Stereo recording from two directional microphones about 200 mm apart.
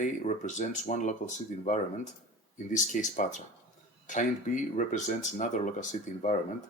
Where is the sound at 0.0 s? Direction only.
35° left (ahead or behind).